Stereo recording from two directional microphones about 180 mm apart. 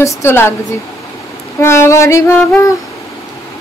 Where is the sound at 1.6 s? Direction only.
15° left (ahead or behind).